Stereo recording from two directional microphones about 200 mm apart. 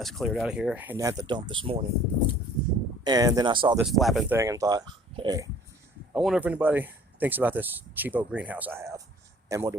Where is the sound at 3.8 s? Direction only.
Centre (ahead or behind).